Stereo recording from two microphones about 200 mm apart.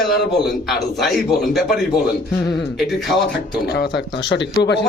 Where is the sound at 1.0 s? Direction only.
Centre (ahead or behind).